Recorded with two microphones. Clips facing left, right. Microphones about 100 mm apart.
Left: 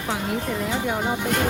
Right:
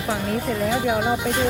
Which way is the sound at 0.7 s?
10° right (ahead or behind).